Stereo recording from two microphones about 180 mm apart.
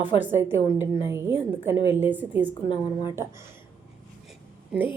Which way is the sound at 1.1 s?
15° right (ahead or behind).